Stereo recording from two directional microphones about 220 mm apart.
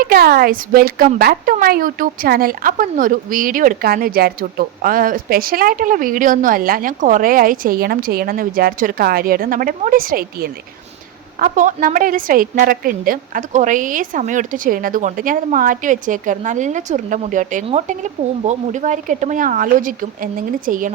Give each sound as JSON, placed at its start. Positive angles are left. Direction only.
{"t": 0.0, "sound": "speech", "side_deg": -40}